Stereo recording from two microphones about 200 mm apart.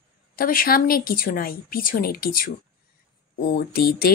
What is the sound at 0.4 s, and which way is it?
Speech, 45° left (ahead or behind).